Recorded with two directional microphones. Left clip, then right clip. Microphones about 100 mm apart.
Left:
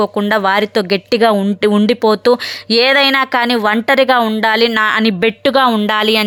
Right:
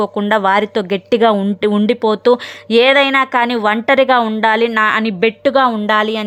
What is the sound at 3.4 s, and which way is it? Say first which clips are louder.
A woman's voice: left 1 dB; 10° left (ahead or behind).